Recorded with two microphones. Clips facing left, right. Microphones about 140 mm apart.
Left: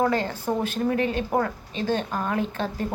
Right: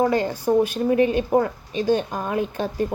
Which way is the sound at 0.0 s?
15° right (ahead or behind).